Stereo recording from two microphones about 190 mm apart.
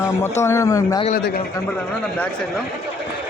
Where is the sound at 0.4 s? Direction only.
15° left (ahead or behind).